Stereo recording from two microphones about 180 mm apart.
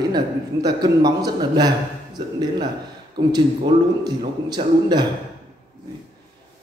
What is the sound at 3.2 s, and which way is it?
A man's voice, 25° right (ahead or behind).